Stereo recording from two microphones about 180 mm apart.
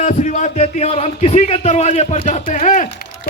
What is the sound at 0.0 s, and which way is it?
A man's voice, 45° left (ahead or behind).